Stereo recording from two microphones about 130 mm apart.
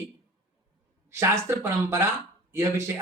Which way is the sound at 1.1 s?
20° right (ahead or behind).